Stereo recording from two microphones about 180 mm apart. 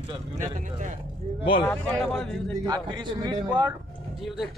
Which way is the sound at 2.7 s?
20° right (ahead or behind).